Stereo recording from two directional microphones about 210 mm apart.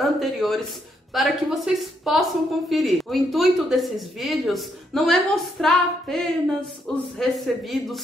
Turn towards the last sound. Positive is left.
turn(degrees=0)  # may be behind; listen again after turning